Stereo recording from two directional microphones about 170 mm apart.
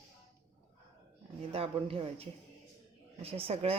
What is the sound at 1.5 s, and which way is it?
A woman's voice, 35° right (ahead or behind).